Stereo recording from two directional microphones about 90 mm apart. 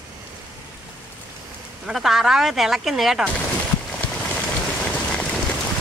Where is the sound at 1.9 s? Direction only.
5° right (ahead or behind).